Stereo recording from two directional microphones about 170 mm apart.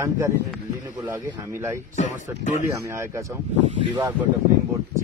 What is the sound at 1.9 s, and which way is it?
Speech, 45° left (ahead or behind).